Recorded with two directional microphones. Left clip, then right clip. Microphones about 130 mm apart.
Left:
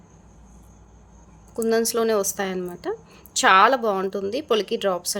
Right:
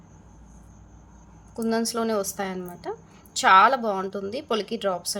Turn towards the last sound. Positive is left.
turn(degrees=35)  # may be behind; listen again after turning